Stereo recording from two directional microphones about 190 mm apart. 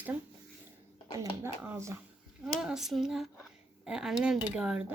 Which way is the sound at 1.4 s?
10° right (ahead or behind).